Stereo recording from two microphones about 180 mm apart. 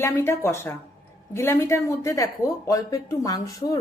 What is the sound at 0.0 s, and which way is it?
A woman's voice, 15° left (ahead or behind).